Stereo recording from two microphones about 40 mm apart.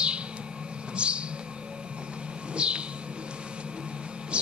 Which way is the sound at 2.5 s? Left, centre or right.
Right.